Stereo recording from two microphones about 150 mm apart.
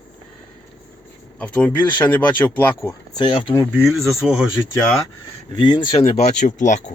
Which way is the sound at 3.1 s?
30° left (ahead or behind).